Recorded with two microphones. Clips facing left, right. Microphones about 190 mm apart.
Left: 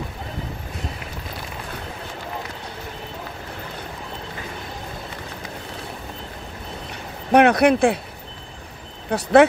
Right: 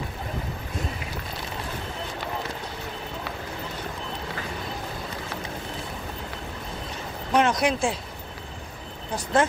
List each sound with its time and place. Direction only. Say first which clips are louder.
7.3 s speech: left 8 dB; 65° left (ahead or behind)
9.1 s speech: left 9 dB; 70° left (ahead or behind)